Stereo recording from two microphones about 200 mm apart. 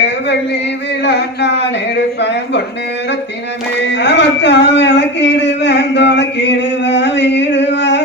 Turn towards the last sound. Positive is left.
turn(degrees=60)  # may be behind; listen again after turning